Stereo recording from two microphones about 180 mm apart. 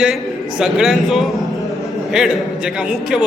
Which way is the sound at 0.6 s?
5° right (ahead or behind).